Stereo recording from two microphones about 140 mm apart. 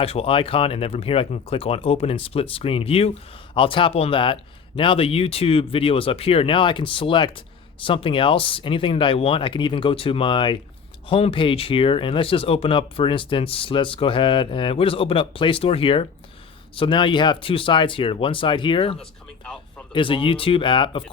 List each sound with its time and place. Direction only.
0.0 s speech: 45° left (ahead or behind)